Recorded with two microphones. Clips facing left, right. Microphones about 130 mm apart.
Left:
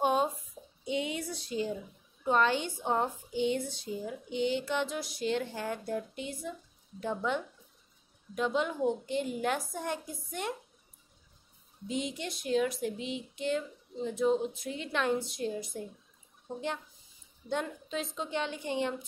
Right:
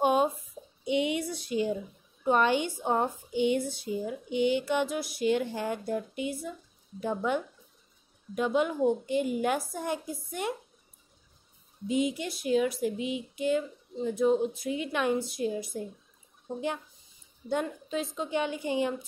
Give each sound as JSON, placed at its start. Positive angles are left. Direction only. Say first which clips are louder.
{"t": 0.0, "sound": "a sound", "louder": "right 3 dB", "side_deg": -10}
{"t": 0.8, "sound": "speech", "louder": "right 5 dB", "side_deg": -15}
{"t": 11.9, "sound": "speech", "louder": "right 6 dB", "side_deg": -5}